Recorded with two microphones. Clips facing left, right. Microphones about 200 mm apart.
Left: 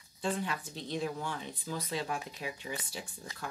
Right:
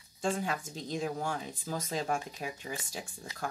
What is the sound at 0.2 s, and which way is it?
Speech, 45° right (ahead or behind).